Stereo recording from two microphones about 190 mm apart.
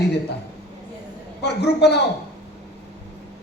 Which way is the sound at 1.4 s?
60° left (ahead or behind).